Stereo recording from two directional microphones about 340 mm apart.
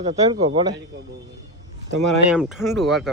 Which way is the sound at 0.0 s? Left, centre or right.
Centre.